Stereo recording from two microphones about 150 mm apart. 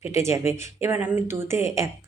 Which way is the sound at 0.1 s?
20° right (ahead or behind).